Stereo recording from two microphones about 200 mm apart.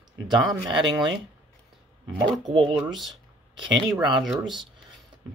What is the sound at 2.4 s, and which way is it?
Speech, 25° right (ahead or behind).